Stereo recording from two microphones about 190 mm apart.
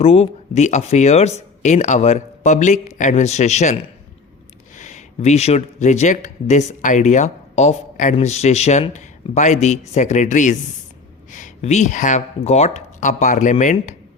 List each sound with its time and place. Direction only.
0.0 s speech: 30° left (ahead or behind)